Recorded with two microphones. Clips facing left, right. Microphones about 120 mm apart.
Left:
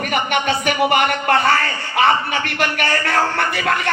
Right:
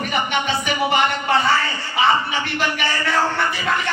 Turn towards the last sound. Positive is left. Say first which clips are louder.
# left 2 dB
turn(degrees=55)  # may be behind; listen again after turning